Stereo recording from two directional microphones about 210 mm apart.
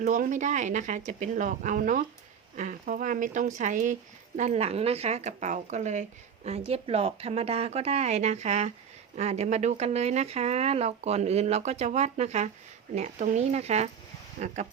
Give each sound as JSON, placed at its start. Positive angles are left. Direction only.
{"t": 0.0, "sound": "speech", "side_deg": -35}